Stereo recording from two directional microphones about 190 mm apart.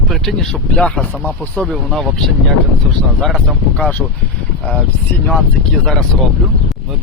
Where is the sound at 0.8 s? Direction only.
5° left (ahead or behind).